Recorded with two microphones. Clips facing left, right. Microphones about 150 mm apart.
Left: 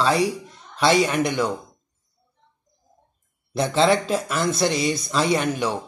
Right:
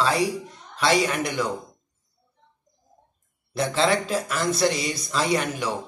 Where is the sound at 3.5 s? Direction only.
25° left (ahead or behind).